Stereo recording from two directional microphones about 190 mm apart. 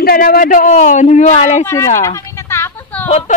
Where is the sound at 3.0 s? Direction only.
35° left (ahead or behind).